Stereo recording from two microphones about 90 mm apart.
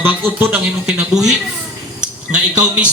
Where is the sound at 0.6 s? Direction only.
10° right (ahead or behind).